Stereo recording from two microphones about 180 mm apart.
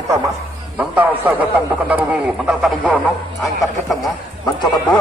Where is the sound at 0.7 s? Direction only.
10° right (ahead or behind).